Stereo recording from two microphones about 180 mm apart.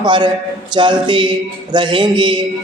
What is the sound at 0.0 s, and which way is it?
Speech, 25° right (ahead or behind).